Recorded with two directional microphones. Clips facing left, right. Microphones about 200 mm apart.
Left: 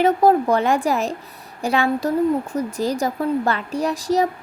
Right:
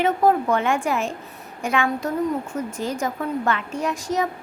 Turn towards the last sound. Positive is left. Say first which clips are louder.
# left 4 dB
turn(degrees=35)  # may be behind; listen again after turning